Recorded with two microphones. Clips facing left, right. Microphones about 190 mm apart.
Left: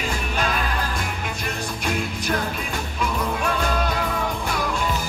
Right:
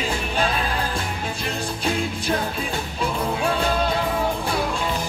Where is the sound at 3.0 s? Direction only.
30° right (ahead or behind).